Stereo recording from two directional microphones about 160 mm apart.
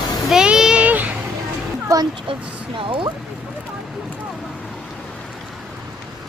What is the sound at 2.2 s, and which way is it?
Speech, 30° right (ahead or behind).